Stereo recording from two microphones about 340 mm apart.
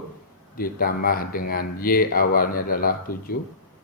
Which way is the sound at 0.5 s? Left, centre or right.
Left.